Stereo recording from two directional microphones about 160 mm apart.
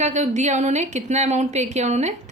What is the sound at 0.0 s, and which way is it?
A woman's voice, 45° right (ahead or behind).